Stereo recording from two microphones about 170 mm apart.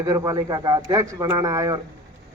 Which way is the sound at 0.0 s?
20° right (ahead or behind).